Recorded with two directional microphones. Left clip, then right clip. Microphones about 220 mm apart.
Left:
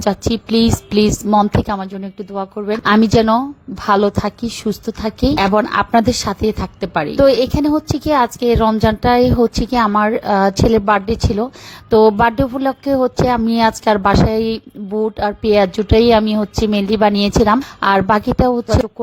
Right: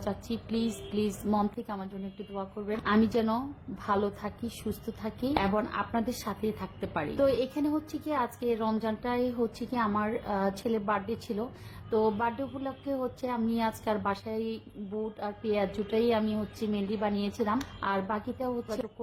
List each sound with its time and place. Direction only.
0.0 s a woman's voice: 45° left (ahead or behind)